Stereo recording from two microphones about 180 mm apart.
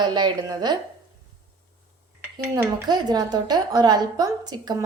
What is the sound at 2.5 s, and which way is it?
A woman's voice, 20° right (ahead or behind).